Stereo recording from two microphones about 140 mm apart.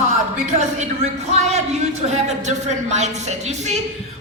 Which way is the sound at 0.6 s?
55° right (ahead or behind).